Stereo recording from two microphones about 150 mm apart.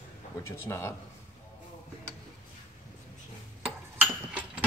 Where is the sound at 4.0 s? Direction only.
10° right (ahead or behind).